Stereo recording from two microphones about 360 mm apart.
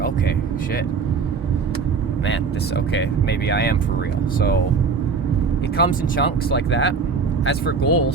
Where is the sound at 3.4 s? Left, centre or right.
Left.